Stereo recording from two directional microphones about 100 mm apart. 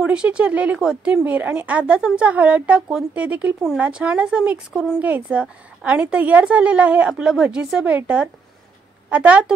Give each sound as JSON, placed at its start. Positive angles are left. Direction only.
{"t": 0.0, "sound": "a woman's voice", "side_deg": -10}